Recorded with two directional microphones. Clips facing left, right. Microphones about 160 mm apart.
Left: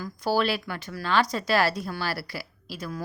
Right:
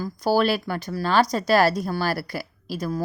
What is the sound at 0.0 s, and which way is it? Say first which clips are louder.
A woman's voice: right 4 dB; 45° right (ahead or behind).